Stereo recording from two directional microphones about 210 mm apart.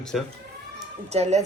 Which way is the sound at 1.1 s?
30° right (ahead or behind).